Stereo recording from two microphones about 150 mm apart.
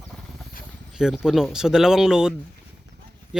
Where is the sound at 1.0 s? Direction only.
5° right (ahead or behind).